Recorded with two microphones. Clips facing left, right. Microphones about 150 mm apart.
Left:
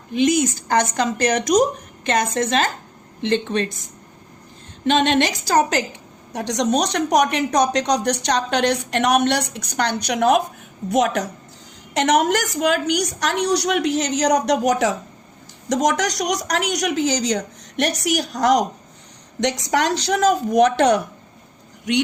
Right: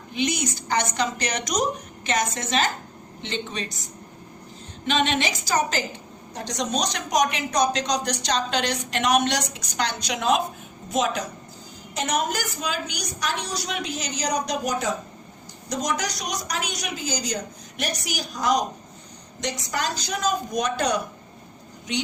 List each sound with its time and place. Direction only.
0.1 s a woman's voice: 45° left (ahead or behind)
4.9 s a woman's voice: 55° left (ahead or behind)
6.3 s a woman's voice: 75° left (ahead or behind)
11.9 s a woman's voice: 85° left
19.4 s a woman's voice: 85° left